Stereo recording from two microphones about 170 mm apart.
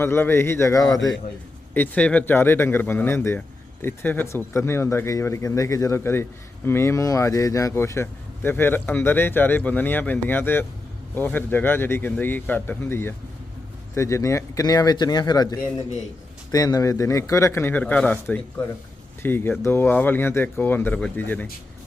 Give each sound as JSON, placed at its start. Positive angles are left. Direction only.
{"t": 0.0, "sound": "speech", "side_deg": 15}
{"t": 1.7, "sound": "speech", "side_deg": 10}